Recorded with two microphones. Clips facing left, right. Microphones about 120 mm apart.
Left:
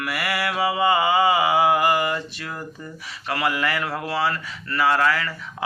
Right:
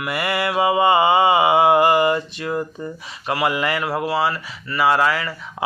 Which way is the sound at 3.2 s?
20° right (ahead or behind).